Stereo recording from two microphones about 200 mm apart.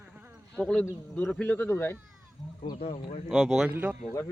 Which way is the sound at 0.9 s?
15° left (ahead or behind).